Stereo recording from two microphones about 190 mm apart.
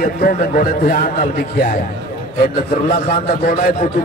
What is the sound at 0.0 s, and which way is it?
A man's voice, 50° left (ahead or behind).